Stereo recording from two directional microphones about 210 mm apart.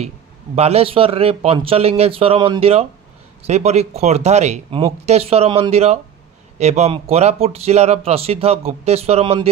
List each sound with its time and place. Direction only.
0.6 s speech: 30° right (ahead or behind)